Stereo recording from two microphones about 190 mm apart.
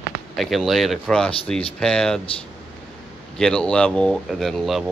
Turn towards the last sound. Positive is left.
turn(degrees=0)  # may be behind; listen again after turning